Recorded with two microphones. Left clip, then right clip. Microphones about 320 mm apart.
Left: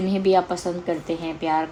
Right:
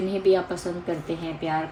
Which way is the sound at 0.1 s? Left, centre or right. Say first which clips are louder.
Left 3 dB; centre.